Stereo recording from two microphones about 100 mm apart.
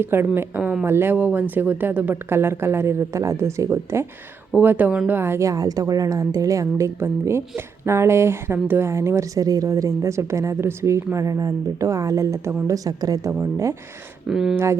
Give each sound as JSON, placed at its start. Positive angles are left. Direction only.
{"t": 0.0, "sound": "speech", "side_deg": -20}
{"t": 0.9, "sound": "a woman's voice", "side_deg": -25}
{"t": 14.3, "sound": "speech", "side_deg": -5}